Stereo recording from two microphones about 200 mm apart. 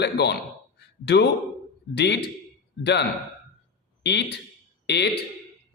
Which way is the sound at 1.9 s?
60° left (ahead or behind).